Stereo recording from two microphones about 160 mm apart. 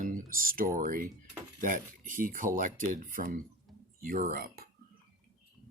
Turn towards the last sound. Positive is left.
turn(degrees=-65)  # may be behind; listen again after turning